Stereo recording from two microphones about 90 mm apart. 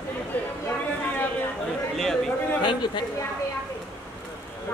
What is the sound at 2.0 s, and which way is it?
Speech, 5° left (ahead or behind).